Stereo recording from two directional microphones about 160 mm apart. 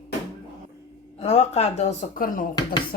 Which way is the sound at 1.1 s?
45° left (ahead or behind).